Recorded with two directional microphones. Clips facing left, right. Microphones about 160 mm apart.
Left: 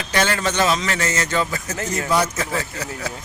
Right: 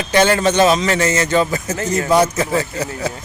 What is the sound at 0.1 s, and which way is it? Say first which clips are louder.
Speech: right 7 dB; 20° right (ahead or behind).